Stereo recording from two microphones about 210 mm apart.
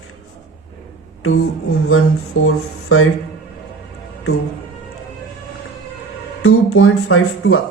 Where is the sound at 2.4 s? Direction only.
80° left.